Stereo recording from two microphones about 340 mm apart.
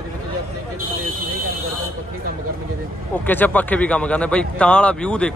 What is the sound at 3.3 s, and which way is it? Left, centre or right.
Speech, centre.